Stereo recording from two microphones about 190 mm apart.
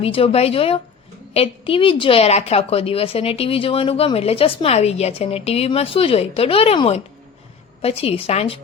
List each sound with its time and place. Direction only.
0.0 s a woman's voice: 30° left (ahead or behind)